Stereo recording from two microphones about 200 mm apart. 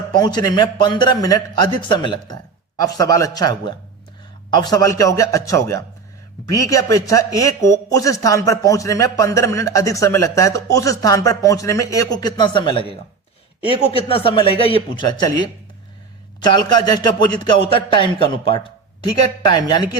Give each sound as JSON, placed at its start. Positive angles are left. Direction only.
{"t": 0.2, "sound": "speech", "side_deg": 20}
{"t": 16.4, "sound": "speech", "side_deg": 20}